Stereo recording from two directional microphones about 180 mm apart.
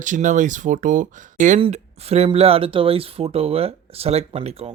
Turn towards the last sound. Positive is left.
turn(degrees=-35)  # may be behind; listen again after turning